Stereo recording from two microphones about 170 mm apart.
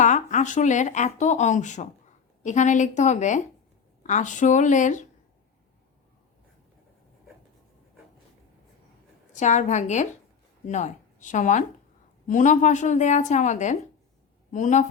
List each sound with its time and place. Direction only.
0.0 s speech: 45° left (ahead or behind)
9.3 s speech: 45° left (ahead or behind)